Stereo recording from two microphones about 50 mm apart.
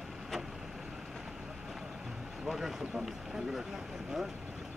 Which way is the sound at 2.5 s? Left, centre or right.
Centre.